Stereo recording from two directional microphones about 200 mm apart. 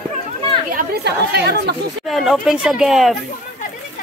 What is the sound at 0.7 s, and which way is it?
Speech, 50° right (ahead or behind).